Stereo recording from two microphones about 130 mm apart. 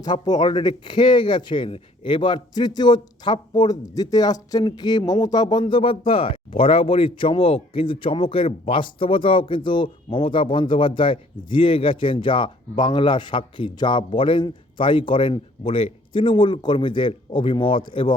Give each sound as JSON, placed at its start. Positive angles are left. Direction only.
{"t": 0.0, "sound": "speech", "side_deg": 30}